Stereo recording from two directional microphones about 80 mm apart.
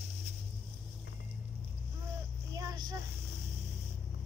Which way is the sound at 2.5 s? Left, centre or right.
Right.